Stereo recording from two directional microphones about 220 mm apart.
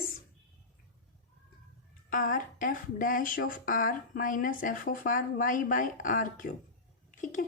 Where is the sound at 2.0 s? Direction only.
40° left (ahead or behind).